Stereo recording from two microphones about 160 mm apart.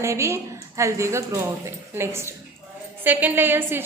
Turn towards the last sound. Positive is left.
turn(degrees=-15)  # may be behind; listen again after turning